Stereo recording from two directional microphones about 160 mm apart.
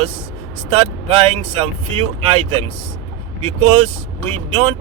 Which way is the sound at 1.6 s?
35° right (ahead or behind).